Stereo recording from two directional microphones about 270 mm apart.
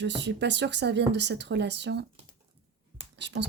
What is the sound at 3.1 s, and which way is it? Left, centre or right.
Speech, right.